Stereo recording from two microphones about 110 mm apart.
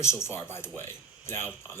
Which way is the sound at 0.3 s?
20° left (ahead or behind).